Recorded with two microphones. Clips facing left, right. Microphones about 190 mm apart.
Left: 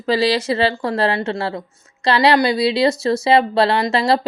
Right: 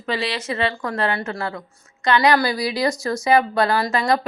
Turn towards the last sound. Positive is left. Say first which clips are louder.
# left 3 dB
turn(degrees=25)  # may be behind; listen again after turning